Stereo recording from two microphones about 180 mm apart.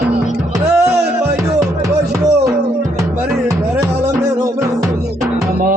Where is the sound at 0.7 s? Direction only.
15° right (ahead or behind).